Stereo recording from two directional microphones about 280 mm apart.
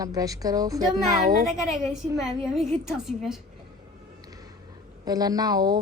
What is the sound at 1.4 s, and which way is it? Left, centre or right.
A woman's voice, centre.